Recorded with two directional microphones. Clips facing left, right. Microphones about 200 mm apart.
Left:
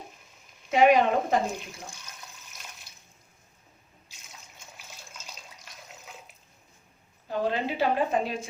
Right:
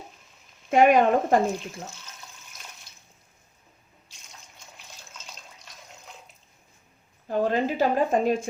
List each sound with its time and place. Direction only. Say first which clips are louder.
0.7 s a woman's voice: right 2 dB; 50° right (ahead or behind)
4.8 s water: even; 5° left (ahead or behind)
7.3 s a woman's voice: right 4 dB; 45° right (ahead or behind)